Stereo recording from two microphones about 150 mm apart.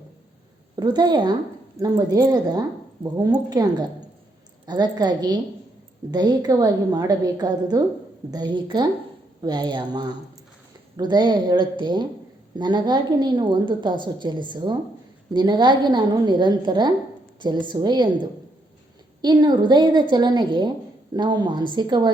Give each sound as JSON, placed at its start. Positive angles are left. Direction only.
{"t": 0.8, "sound": "a woman's voice", "side_deg": -30}